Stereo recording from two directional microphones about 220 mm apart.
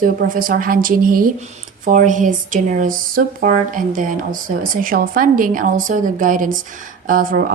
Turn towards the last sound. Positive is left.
turn(degrees=-40)  # may be behind; listen again after turning